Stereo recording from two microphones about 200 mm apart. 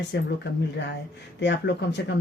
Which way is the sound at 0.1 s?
60° left (ahead or behind).